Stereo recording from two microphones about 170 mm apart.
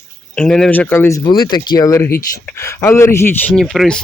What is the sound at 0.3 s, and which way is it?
Speech, 5° left (ahead or behind).